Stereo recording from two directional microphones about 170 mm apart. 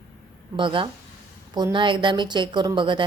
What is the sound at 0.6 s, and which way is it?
Speech, 30° right (ahead or behind).